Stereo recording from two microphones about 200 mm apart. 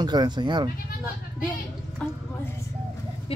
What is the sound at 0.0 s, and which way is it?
Speech, 20° right (ahead or behind).